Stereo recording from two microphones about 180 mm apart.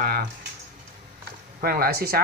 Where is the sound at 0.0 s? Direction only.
55° right (ahead or behind).